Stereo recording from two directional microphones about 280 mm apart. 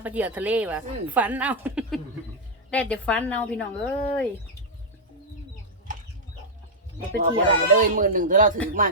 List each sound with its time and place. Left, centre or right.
0.0 s a woman's voice: centre
7.1 s speech: right